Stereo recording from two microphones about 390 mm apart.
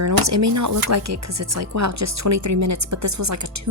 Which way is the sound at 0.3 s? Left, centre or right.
Right.